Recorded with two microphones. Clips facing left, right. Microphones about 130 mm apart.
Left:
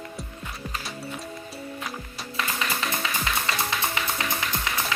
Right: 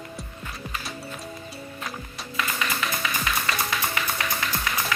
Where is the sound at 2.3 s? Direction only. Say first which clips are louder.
Right 1 dB; 30° left (ahead or behind).